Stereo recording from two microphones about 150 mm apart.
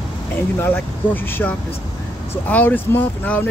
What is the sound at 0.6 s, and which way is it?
Speech, 15° left (ahead or behind).